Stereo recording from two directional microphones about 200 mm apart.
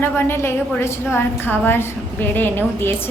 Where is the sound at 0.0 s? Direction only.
10° left (ahead or behind).